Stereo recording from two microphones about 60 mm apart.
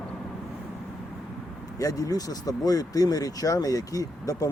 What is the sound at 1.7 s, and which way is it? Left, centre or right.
Speech, left.